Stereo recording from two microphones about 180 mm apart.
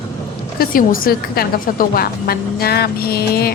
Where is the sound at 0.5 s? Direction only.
50° left (ahead or behind).